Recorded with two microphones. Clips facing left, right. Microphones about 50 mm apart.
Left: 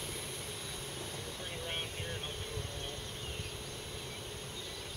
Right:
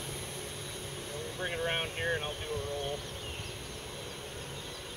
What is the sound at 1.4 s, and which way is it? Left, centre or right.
Speech, right.